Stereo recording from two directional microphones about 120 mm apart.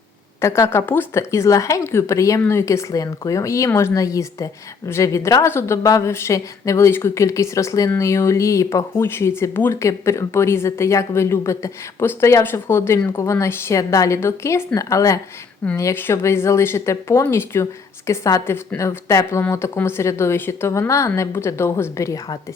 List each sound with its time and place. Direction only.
0.4 s speech: 25° left (ahead or behind)